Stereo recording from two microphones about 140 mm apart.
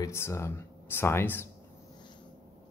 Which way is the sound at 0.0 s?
20° left (ahead or behind).